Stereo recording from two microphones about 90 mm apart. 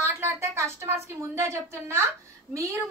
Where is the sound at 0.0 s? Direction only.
30° right (ahead or behind).